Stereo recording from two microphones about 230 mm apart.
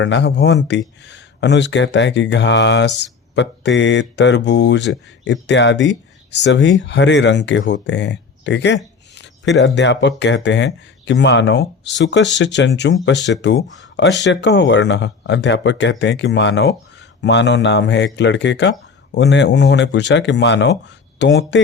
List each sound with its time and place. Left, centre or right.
0.0 s speech: left